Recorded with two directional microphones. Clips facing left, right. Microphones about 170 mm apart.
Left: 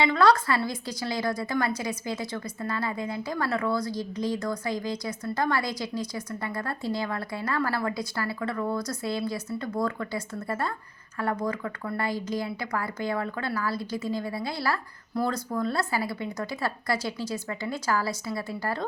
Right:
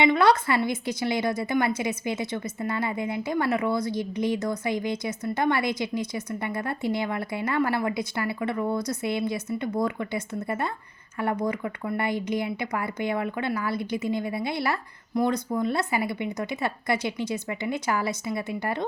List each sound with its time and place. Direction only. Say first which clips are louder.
0.0 s a woman's voice: right 1 dB; 20° right (ahead or behind)